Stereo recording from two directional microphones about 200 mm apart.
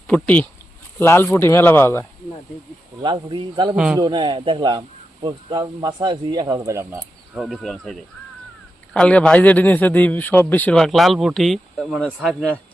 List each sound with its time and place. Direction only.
0.1 s a man's voice: 10° left (ahead or behind)
3.0 s speech: 25° right (ahead or behind)
7.3 s a man's voice: centre (ahead or behind)